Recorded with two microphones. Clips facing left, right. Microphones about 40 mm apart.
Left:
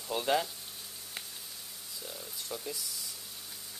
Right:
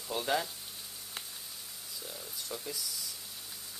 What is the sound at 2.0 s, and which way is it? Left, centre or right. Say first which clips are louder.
Speech: left 1 dB; centre.